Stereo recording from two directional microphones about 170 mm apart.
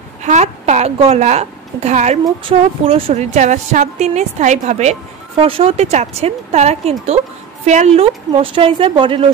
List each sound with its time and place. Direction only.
0.2 s a woman's voice: 45° right (ahead or behind)
2.2 s speech: 30° right (ahead or behind)
3.1 s a woman's voice: 45° right (ahead or behind)